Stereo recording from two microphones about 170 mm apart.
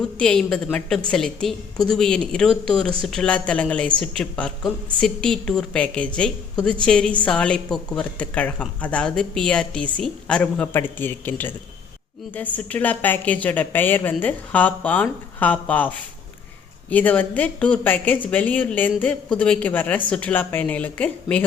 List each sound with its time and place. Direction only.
0.2 s a woman's voice: 5° left (ahead or behind)